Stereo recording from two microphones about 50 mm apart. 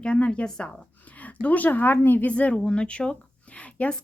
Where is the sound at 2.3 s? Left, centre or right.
Left.